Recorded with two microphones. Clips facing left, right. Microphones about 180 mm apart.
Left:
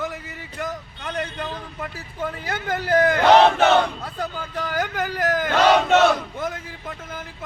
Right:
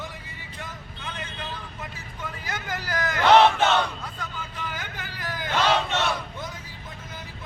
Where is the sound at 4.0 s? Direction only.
35° left (ahead or behind).